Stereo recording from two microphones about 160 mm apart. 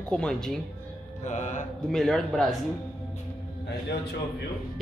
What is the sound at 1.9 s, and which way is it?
Speech, centre (ahead or behind).